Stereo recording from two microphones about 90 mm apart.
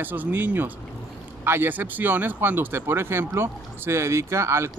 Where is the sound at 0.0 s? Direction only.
20° right (ahead or behind).